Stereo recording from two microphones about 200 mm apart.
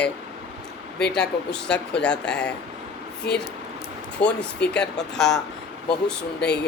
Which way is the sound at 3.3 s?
55° left (ahead or behind).